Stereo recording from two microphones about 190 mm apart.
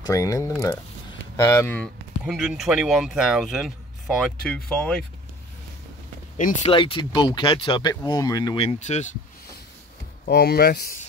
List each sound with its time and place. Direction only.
0.0 s speech: 15° left (ahead or behind)
6.3 s speech: 45° left (ahead or behind)
6.7 s speech: 25° left (ahead or behind)
8.7 s speech: 35° left (ahead or behind)
10.2 s speech: 55° left (ahead or behind)